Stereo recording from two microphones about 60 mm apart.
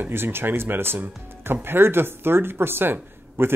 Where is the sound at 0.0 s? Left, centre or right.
Right.